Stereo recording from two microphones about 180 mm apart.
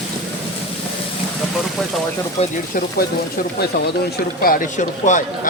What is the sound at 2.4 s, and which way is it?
A man's voice, 50° left (ahead or behind).